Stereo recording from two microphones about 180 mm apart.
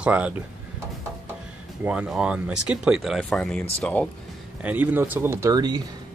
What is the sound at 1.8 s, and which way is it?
Speech, 5° right (ahead or behind).